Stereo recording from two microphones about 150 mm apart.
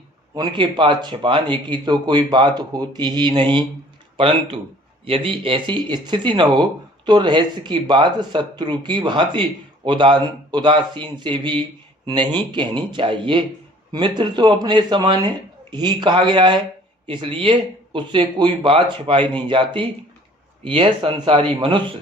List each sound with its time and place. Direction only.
0.3 s speech: 30° right (ahead or behind)